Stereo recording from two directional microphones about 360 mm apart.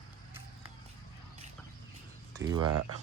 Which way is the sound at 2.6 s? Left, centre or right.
Right.